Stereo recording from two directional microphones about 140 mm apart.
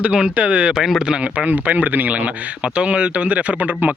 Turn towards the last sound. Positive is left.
turn(degrees=-10)  # may be behind; listen again after turning